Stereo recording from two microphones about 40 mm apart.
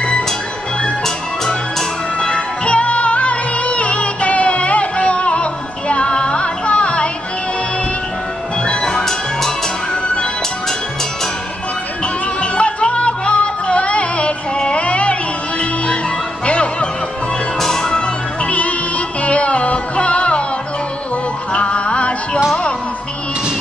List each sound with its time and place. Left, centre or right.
0.8 s music: centre
2.1 s music: left
8.6 s music: left
12.4 s music: left
17.6 s music: centre
18.5 s music: left
21.5 s music: left